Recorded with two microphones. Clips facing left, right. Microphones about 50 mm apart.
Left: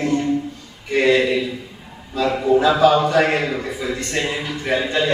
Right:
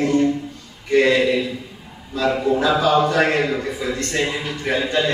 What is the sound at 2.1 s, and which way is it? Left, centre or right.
A man's voice, centre.